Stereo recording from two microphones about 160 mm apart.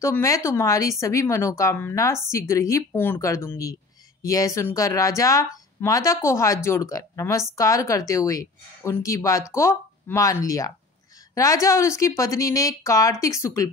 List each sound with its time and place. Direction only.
0.0 s speech: 20° left (ahead or behind)